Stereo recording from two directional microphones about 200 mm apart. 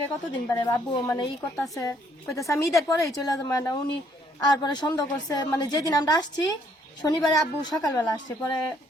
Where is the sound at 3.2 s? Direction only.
20° left (ahead or behind).